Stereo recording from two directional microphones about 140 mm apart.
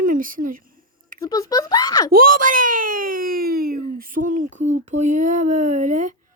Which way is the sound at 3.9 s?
75° right (ahead or behind).